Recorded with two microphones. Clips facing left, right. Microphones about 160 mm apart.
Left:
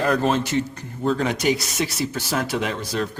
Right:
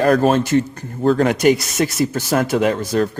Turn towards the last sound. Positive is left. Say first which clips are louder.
# right 8 dB
turn(degrees=-45)  # may be behind; listen again after turning